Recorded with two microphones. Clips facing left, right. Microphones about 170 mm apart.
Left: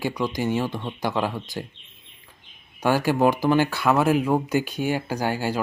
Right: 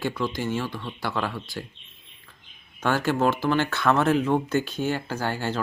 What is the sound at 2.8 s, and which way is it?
Speech, 15° left (ahead or behind).